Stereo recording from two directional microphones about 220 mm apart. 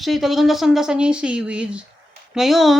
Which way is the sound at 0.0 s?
Centre (ahead or behind).